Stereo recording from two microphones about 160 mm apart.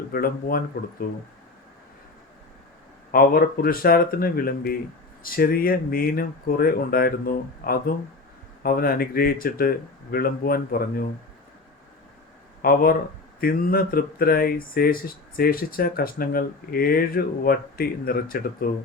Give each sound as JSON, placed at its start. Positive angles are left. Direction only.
{"t": 0.1, "sound": "speech", "side_deg": 65}
{"t": 3.1, "sound": "speech", "side_deg": 65}
{"t": 12.6, "sound": "speech", "side_deg": 65}